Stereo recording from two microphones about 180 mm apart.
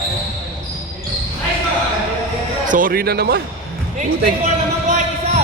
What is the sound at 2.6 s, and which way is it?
Speech, 50° right (ahead or behind).